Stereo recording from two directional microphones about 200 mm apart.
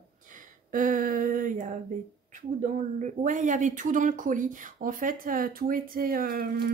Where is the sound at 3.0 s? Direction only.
40° right (ahead or behind).